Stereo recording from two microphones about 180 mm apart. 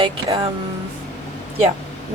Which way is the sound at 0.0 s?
30° right (ahead or behind).